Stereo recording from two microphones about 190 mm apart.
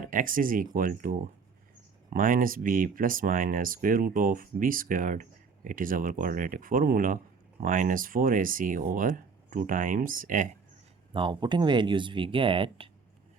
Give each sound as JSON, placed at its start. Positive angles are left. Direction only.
{"t": 0.1, "sound": "speech", "side_deg": -45}
{"t": 11.1, "sound": "speech", "side_deg": -25}